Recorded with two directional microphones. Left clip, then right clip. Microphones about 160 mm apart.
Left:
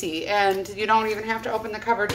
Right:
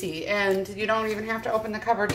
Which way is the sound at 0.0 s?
25° left (ahead or behind).